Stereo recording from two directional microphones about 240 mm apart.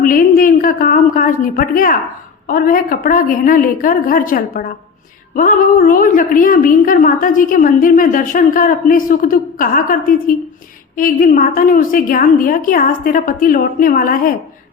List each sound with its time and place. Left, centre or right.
0.0 s a woman's voice: left